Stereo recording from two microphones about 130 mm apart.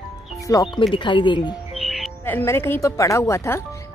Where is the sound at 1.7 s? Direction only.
Centre (ahead or behind).